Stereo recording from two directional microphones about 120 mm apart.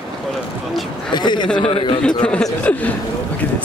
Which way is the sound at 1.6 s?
50° left (ahead or behind).